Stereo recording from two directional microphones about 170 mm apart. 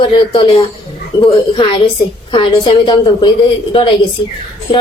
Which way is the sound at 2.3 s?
30° left (ahead or behind).